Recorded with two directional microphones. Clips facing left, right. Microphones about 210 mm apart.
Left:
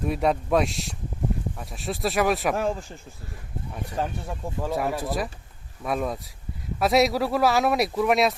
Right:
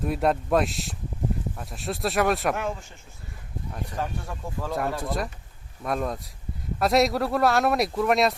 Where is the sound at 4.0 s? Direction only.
30° left (ahead or behind).